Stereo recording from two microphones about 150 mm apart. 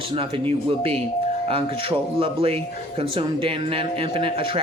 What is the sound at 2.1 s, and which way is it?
A man's voice, 40° right (ahead or behind).